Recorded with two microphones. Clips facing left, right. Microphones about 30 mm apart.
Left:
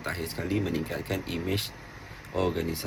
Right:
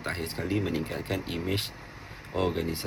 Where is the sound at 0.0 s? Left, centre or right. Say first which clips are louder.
Even; centre.